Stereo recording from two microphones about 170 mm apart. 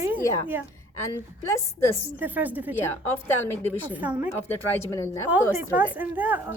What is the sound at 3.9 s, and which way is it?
Speech, 10° right (ahead or behind).